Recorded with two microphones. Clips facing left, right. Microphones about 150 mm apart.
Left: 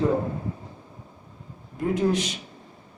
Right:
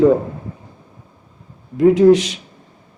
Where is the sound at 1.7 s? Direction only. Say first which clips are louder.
Right 13 dB; 90° right.